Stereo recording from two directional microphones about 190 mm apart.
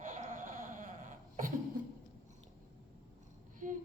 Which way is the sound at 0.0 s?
45° right (ahead or behind).